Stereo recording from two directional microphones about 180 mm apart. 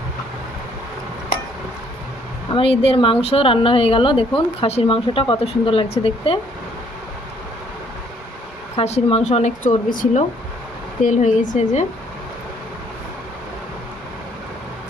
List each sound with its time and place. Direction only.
2.5 s speech: 30° left (ahead or behind)
8.7 s speech: 35° left (ahead or behind)